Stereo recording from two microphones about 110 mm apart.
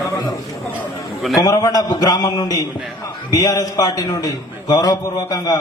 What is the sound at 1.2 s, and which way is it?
Speech, centre (ahead or behind).